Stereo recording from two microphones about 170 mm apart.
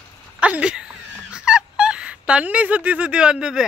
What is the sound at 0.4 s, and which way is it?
Speech, 5° right (ahead or behind).